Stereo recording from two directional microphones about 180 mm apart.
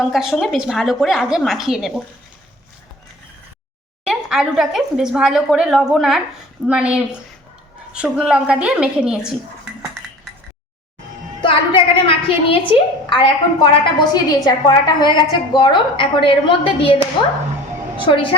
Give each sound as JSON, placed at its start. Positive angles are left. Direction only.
{"t": 0.0, "sound": "speech", "side_deg": 0}
{"t": 4.0, "sound": "speech", "side_deg": -5}
{"t": 11.4, "sound": "a woman's voice", "side_deg": 30}